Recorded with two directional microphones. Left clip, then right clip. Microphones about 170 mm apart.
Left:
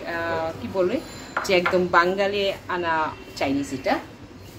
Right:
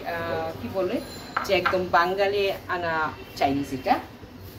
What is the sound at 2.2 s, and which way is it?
Speech, 20° left (ahead or behind).